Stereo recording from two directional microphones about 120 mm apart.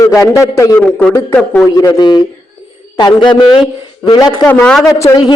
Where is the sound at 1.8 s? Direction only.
30° left (ahead or behind).